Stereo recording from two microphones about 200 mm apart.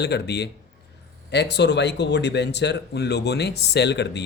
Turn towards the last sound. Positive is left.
turn(degrees=60)  # may be behind; listen again after turning